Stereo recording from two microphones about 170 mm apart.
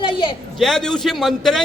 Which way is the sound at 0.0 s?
30° left (ahead or behind).